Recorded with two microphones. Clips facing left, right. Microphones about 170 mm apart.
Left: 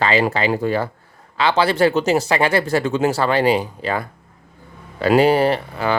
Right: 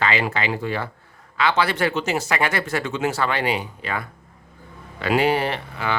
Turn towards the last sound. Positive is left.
turn(degrees=40)  # may be behind; listen again after turning